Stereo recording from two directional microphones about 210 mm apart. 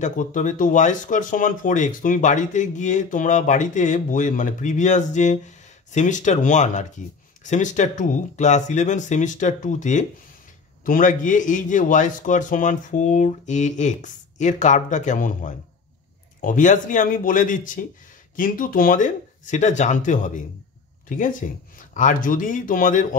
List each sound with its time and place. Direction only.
0.0 s speech: 35° left (ahead or behind)